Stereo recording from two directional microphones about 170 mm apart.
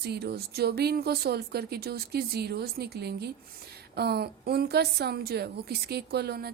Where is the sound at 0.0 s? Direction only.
70° right (ahead or behind).